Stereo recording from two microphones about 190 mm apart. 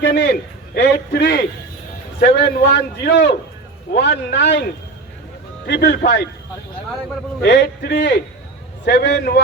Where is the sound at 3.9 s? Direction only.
60° left (ahead or behind).